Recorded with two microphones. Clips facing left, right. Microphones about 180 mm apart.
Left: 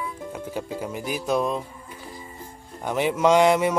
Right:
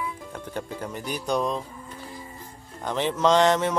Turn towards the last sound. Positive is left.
turn(degrees=10)  # may be behind; listen again after turning